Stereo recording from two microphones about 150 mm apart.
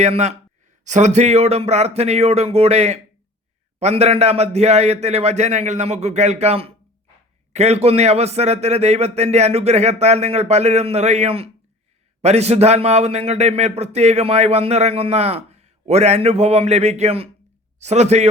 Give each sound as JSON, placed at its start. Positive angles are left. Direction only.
{"t": 0.0, "sound": "a man's voice", "side_deg": -50}